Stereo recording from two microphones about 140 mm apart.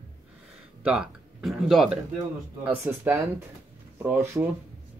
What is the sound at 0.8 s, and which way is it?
Speech, 5° right (ahead or behind).